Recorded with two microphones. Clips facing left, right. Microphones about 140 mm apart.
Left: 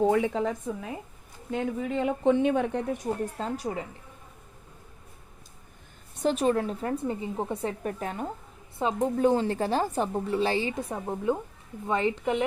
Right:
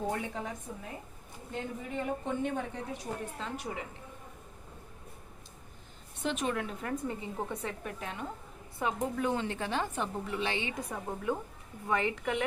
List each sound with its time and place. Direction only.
0.0 s speech: 90° left; by 3.0 s 70° left (ahead or behind)
3.0 s a woman's voice: 40° left (ahead or behind)
6.2 s a woman's voice: 35° left (ahead or behind)
8.8 s a woman's voice: 25° left (ahead or behind)